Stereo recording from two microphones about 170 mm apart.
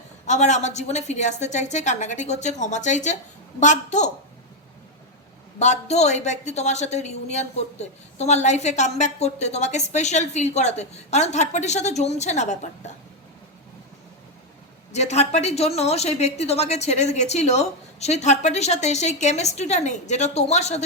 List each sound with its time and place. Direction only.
0.3 s a woman's voice: 45° left (ahead or behind)
5.5 s a woman's voice: 40° left (ahead or behind)
14.9 s a woman's voice: 40° left (ahead or behind)